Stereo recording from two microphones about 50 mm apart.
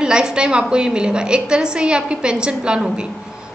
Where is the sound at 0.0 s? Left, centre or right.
Centre.